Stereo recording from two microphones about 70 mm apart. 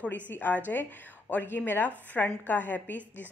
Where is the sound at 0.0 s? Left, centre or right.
Left.